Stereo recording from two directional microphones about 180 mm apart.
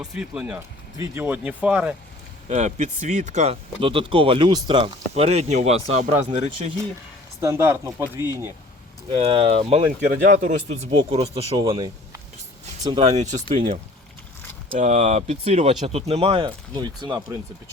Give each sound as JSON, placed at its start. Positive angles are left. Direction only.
{"t": 0.0, "sound": "speech", "side_deg": -5}
{"t": 0.9, "sound": "speech", "side_deg": -15}
{"t": 2.5, "sound": "speech", "side_deg": -40}
{"t": 7.4, "sound": "speech", "side_deg": -15}
{"t": 9.1, "sound": "speech", "side_deg": -30}
{"t": 13.0, "sound": "speech", "side_deg": -40}
{"t": 14.7, "sound": "speech", "side_deg": -40}